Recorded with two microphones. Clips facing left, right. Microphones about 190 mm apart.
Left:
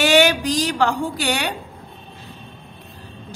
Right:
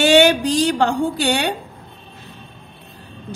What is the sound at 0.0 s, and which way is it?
Speech, 30° right (ahead or behind).